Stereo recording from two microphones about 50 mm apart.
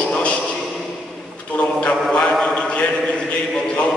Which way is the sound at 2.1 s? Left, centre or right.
Centre.